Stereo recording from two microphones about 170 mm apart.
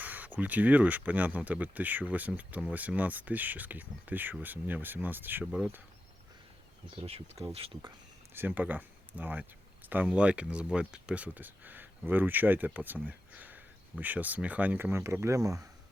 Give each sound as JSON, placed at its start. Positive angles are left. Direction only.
{"t": 0.0, "sound": "a sound", "side_deg": -10}
{"t": 0.3, "sound": "speech", "side_deg": -10}
{"t": 6.9, "sound": "speech", "side_deg": -35}
{"t": 8.3, "sound": "speech", "side_deg": -10}